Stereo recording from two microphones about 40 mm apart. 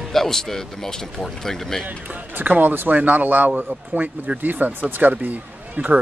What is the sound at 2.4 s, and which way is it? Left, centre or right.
Speech, right.